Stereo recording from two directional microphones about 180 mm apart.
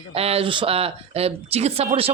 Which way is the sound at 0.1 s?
35° right (ahead or behind).